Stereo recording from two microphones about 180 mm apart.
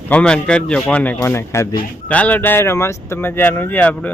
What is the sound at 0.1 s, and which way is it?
Speech, 5° left (ahead or behind).